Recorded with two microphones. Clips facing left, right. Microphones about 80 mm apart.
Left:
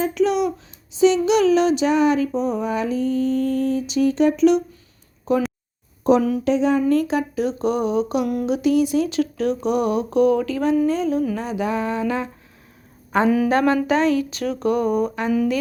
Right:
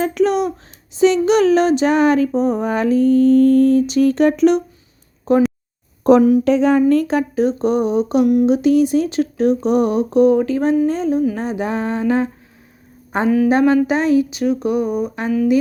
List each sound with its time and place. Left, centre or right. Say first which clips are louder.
0.0 s a sound: right 3 dB; right
5.3 s music: right 5 dB; right
6.0 s a sound: right 6 dB; right
7.3 s music: right 7 dB; right
8.4 s speech: right 5 dB; right
10.8 s music: right 3 dB; right
13.1 s speech: right 3 dB; right; by 15.1 s centre